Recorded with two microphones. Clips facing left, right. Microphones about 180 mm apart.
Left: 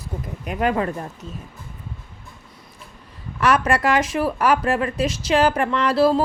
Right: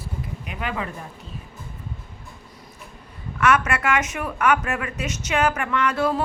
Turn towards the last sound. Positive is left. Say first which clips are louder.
# left 5 dB
turn(degrees=30)  # may be behind; listen again after turning